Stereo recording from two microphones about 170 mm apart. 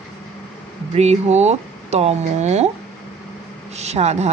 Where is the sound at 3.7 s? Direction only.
40° right (ahead or behind).